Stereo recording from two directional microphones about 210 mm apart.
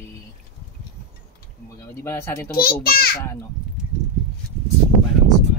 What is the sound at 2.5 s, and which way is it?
Speech, 45° left (ahead or behind).